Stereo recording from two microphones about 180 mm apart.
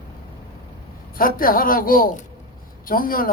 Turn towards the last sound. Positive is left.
turn(degrees=50)  # may be behind; listen again after turning